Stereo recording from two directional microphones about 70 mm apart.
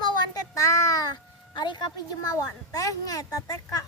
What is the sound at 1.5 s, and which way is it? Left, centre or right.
Speech, left.